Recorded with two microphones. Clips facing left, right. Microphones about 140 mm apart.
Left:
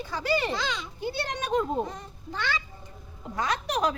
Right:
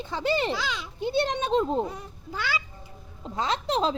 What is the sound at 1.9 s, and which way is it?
Speech, 5° right (ahead or behind).